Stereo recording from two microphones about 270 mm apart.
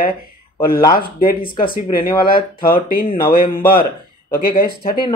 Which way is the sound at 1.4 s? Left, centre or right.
Centre.